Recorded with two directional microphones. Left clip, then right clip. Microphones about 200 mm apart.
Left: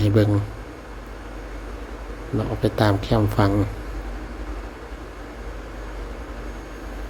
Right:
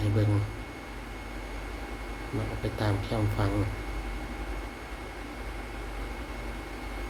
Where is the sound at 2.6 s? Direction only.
35° left (ahead or behind).